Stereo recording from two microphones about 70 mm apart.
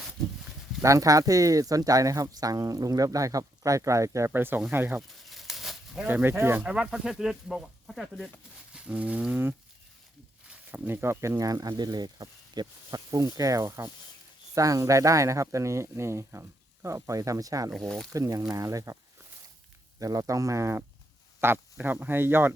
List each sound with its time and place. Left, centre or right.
0.8 s speech: right
4.3 s speech: right
5.2 s a sound: centre
6.1 s speech: right
6.7 s speech: centre
8.7 s wild animals: centre
10.8 s speech: right
11.8 s speech: right
17.8 s speech: centre
18.1 s speech: right
20.0 s speech: right